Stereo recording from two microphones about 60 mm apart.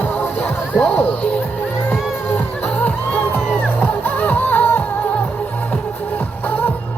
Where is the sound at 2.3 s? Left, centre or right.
Left.